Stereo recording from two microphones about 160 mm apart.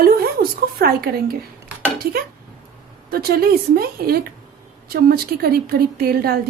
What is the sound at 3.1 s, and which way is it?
A woman's voice, 70° right (ahead or behind).